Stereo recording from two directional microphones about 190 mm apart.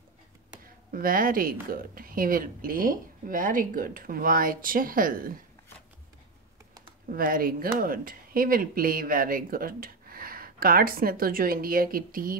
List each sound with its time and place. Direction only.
0.9 s speech: 50° right (ahead or behind)
7.1 s speech: 50° right (ahead or behind)